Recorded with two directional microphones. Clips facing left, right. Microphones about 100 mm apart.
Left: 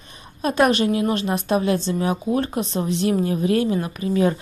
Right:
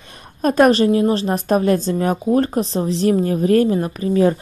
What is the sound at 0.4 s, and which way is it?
A woman's voice, 45° right (ahead or behind).